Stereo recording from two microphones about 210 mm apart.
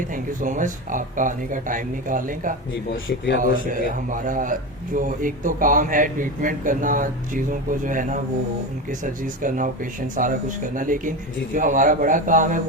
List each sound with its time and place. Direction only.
0.0 s a man's voice: 40° right (ahead or behind)
3.1 s speech: 55° left (ahead or behind)
3.4 s a man's voice: 40° right (ahead or behind)